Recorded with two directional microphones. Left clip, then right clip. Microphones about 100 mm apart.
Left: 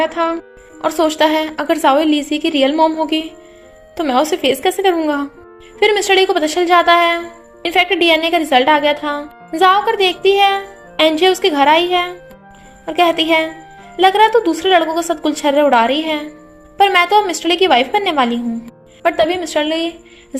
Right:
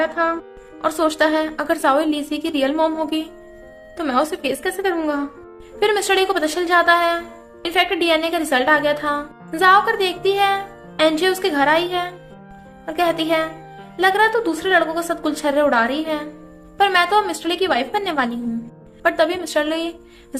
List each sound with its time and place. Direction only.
0.0 s a woman's voice: 30° left (ahead or behind)
19.0 s a woman's voice: 20° left (ahead or behind)